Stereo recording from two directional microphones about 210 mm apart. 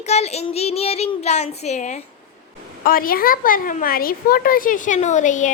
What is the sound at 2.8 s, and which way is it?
A child's voice, 45° left (ahead or behind).